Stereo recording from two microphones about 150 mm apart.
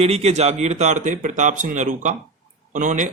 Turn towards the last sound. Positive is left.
turn(degrees=-55)  # may be behind; listen again after turning